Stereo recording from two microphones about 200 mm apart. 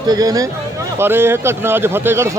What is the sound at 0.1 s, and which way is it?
Speech, 20° right (ahead or behind).